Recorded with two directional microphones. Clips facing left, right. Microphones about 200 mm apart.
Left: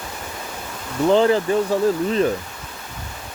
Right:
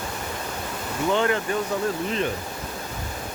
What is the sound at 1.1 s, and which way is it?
Speech, 30° left (ahead or behind).